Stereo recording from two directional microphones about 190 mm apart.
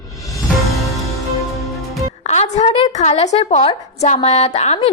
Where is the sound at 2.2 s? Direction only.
35° left (ahead or behind).